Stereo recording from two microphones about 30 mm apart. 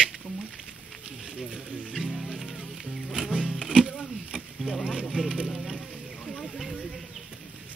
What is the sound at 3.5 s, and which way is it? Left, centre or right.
Music, centre.